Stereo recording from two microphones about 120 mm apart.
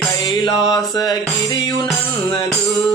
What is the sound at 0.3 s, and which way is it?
Music, 35° left (ahead or behind).